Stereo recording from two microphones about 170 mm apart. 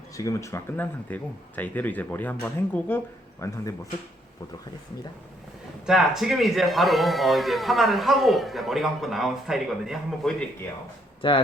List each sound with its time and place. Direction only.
0.2 s speech: 20° left (ahead or behind)
5.8 s speech: 5° right (ahead or behind)
11.2 s speech: 30° left (ahead or behind)